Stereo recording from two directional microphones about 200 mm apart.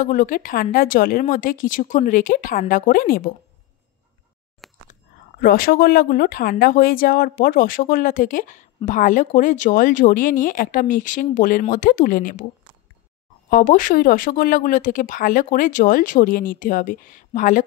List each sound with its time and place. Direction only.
0.0 s speech: 40° left (ahead or behind)
4.6 s a sound: centre (ahead or behind)
5.4 s speech: 45° left (ahead or behind)
13.5 s speech: 45° left (ahead or behind)